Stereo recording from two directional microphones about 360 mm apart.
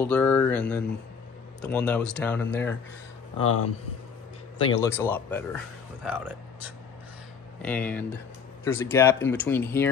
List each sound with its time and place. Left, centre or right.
0.0 s speech: centre
3.3 s speech: left
4.6 s speech: centre
6.0 s speech: centre